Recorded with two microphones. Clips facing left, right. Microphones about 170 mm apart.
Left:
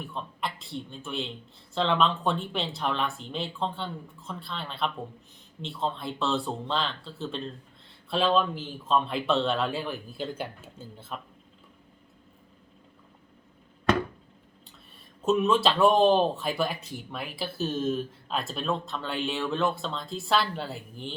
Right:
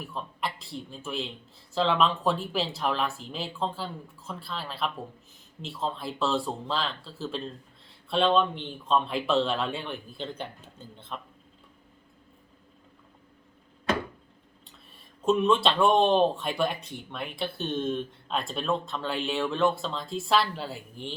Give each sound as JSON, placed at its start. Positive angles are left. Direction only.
{"t": 0.0, "sound": "speech", "side_deg": 0}
{"t": 15.2, "sound": "speech", "side_deg": 0}